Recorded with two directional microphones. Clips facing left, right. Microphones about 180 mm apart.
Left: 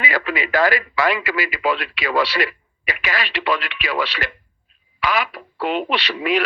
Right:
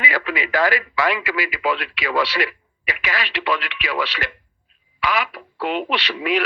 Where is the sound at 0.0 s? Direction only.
40° left (ahead or behind).